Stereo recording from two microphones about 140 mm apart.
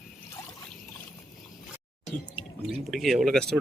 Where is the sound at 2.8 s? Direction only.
Centre (ahead or behind).